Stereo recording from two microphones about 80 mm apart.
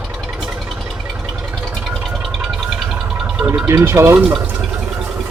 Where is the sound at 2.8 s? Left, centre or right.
Centre.